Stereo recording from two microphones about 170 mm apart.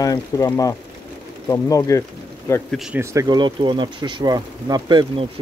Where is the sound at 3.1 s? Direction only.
20° right (ahead or behind).